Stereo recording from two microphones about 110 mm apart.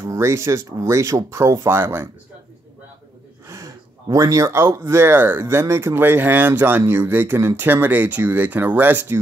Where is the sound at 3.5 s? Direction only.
30° right (ahead or behind).